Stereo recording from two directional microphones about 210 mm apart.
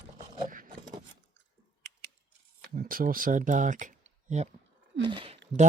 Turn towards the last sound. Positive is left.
turn(degrees=-25)  # may be behind; listen again after turning